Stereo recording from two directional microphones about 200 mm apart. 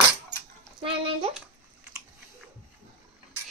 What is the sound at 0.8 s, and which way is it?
Speech, 30° right (ahead or behind).